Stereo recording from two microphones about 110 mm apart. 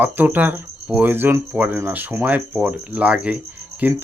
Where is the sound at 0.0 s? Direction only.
15° right (ahead or behind).